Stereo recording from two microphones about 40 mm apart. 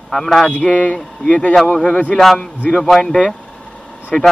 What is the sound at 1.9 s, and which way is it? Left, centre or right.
Speech, left.